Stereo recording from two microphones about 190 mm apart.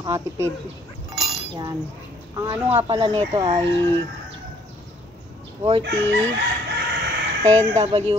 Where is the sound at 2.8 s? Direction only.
25° right (ahead or behind).